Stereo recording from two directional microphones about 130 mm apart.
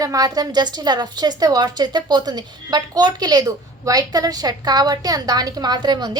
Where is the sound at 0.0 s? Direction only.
25° right (ahead or behind).